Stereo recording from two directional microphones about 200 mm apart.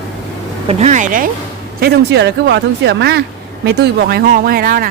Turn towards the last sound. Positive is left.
turn(degrees=-45)  # may be behind; listen again after turning